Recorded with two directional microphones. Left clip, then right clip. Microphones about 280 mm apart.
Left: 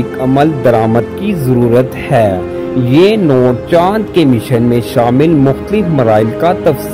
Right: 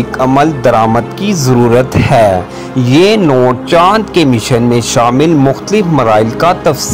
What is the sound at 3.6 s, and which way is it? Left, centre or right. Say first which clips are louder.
Speech: right 3 dB; centre.